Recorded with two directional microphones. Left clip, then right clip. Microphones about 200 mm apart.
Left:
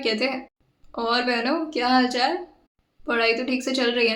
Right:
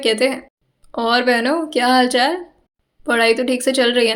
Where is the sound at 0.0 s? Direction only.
35° right (ahead or behind).